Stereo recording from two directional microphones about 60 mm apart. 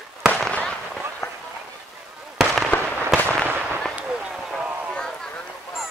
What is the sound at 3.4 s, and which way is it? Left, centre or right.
Fireworks, right.